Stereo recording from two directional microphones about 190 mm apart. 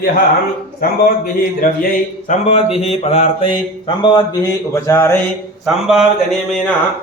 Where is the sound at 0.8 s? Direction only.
50° left (ahead or behind); by 5.2 s 15° left (ahead or behind).